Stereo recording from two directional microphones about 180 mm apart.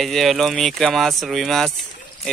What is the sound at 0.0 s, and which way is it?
Speech, centre (ahead or behind).